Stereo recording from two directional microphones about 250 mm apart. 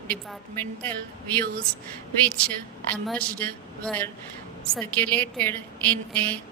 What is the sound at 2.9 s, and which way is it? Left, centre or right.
A woman's voice, centre.